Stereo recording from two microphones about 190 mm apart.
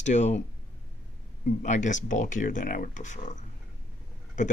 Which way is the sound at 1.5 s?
40° left (ahead or behind).